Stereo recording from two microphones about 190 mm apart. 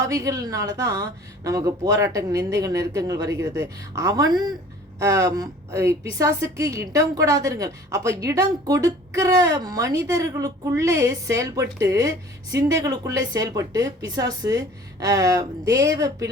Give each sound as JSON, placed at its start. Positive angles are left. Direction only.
{"t": 0.0, "sound": "a woman's voice", "side_deg": -15}